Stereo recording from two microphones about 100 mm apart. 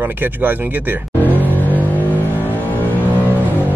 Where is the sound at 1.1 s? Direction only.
15° left (ahead or behind).